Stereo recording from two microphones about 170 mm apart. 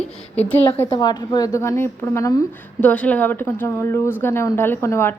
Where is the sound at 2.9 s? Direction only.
10° left (ahead or behind).